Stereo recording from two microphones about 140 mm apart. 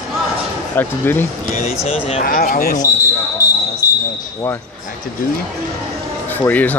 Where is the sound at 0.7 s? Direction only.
15° left (ahead or behind).